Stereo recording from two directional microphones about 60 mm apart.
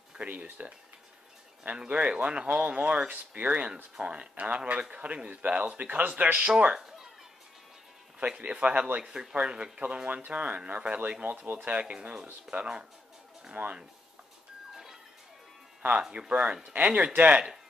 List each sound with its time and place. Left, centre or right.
0.1 s speech: centre
6.8 s a sound: centre
8.2 s speech: right
16.0 s speech: centre